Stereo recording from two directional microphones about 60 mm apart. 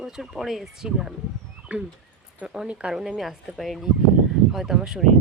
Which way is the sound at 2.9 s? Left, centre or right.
Centre.